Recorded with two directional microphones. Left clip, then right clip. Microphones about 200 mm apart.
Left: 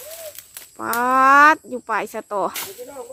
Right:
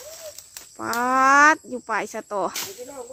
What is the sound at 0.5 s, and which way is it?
Speech, 5° left (ahead or behind).